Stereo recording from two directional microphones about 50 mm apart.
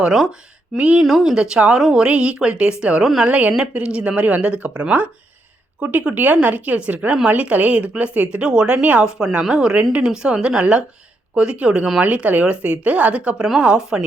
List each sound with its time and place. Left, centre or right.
0.0 s speech: centre
0.8 s speech: right
1.0 s speech: centre; by 3.0 s right
3.0 s speech: centre
3.2 s speech: right